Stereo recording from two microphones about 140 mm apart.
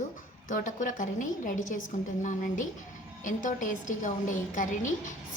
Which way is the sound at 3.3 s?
70° left (ahead or behind).